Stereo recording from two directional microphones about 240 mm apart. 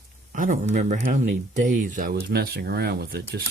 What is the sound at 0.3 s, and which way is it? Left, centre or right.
Speech, right.